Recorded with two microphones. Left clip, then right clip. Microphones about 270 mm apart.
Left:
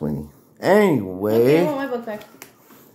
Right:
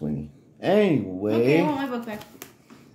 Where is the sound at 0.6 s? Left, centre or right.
Centre.